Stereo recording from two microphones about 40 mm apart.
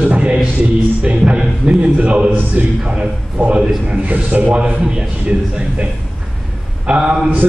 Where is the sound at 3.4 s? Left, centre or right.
Right.